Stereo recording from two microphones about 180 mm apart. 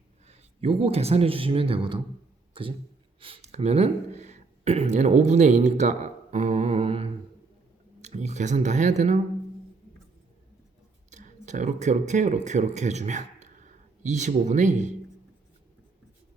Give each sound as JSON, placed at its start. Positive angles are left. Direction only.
{"t": 0.3, "sound": "speech", "side_deg": -35}
{"t": 3.2, "sound": "speech", "side_deg": -35}
{"t": 11.1, "sound": "speech", "side_deg": -45}